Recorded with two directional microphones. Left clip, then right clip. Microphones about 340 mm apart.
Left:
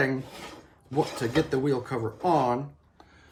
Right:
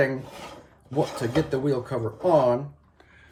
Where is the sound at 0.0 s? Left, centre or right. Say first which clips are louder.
Right 3 dB; centre.